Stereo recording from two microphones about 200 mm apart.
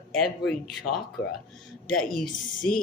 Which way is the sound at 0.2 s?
Centre (ahead or behind).